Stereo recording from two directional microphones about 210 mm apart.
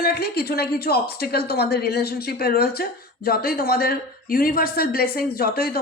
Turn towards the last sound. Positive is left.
turn(degrees=45)  # may be behind; listen again after turning